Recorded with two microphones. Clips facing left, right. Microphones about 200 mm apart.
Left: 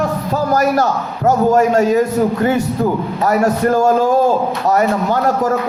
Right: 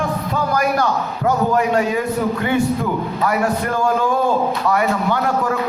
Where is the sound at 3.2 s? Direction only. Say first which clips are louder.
Left 6 dB; 40° left (ahead or behind).